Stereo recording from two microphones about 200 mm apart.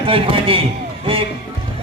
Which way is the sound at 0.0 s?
25° right (ahead or behind).